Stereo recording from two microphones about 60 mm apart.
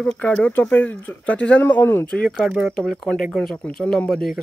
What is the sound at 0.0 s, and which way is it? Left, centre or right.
A man's voice, left.